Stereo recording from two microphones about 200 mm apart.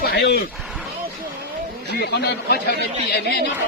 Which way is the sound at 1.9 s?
55° left (ahead or behind).